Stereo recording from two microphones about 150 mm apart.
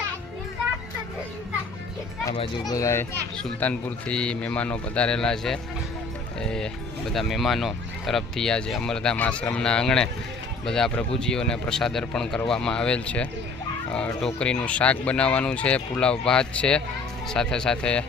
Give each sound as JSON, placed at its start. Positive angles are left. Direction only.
{"t": 2.6, "sound": "a child's voice", "side_deg": 20}
{"t": 14.3, "sound": "speech", "side_deg": 5}